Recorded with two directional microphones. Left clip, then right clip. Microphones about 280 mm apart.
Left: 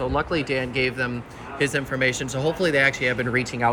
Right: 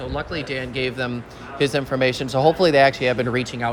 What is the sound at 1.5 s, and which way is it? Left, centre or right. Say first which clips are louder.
Speech: right 3 dB; right.